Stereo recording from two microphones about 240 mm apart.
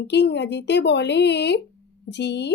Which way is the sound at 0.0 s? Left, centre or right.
Left.